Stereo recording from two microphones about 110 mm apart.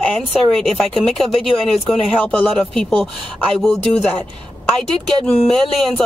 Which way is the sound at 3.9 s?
15° left (ahead or behind).